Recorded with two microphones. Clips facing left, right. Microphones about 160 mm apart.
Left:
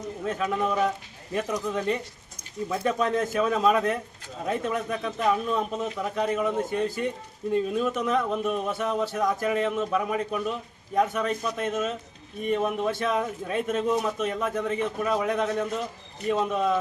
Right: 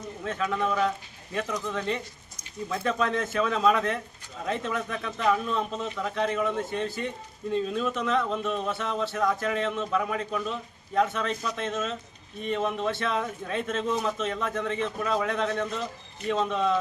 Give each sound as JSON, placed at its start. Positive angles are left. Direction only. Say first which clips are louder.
{"t": 0.6, "sound": "a man's voice", "louder": "even", "side_deg": 10}